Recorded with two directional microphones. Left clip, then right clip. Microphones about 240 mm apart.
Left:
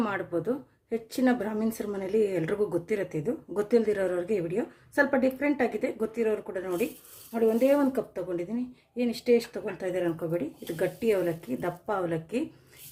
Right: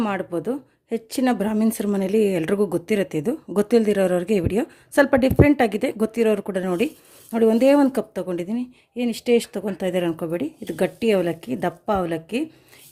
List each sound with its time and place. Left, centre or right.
0.0 s speech: right